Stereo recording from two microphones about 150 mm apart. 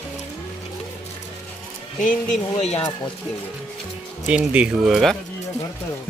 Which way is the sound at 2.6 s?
45° left (ahead or behind).